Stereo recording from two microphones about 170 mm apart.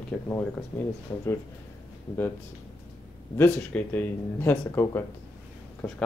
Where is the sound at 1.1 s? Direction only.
20° left (ahead or behind).